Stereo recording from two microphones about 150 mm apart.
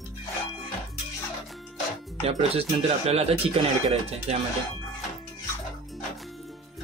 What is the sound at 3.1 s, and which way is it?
Speech, 45° right (ahead or behind).